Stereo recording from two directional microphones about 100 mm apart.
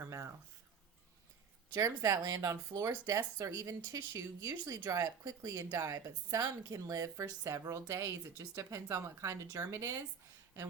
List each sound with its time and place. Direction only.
0.0 s speech: 30° right (ahead or behind)
1.7 s speech: 30° right (ahead or behind)